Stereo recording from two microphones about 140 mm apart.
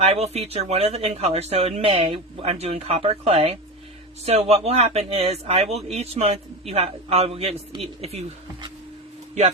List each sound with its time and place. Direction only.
0.0 s speech: 45° right (ahead or behind)